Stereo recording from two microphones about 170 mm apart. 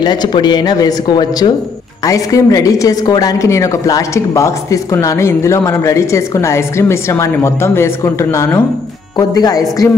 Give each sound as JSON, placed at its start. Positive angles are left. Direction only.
{"t": 0.0, "sound": "a woman's voice", "side_deg": 25}